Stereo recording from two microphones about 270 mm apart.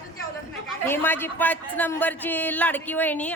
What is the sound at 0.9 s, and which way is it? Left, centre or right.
A man's voice, centre.